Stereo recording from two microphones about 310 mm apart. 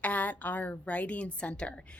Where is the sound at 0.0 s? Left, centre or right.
Centre.